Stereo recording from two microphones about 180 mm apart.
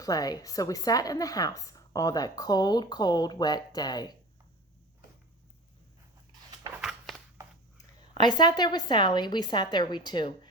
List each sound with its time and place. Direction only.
0.0 s speech: 20° left (ahead or behind)
7.1 s a sound: centre (ahead or behind)
8.1 s speech: 25° left (ahead or behind)